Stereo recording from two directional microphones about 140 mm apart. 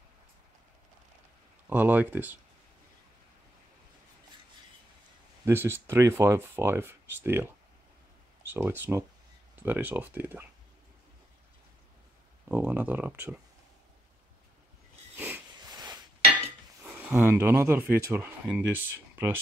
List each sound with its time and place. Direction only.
1.7 s speech: 15° right (ahead or behind)
5.4 s speech: 15° right (ahead or behind)
8.5 s speech: 15° right (ahead or behind)
12.4 s speech: 15° right (ahead or behind)
15.1 s a sound: 15° right (ahead or behind)
15.7 s a sound: 30° right (ahead or behind)
16.8 s speech: 15° right (ahead or behind)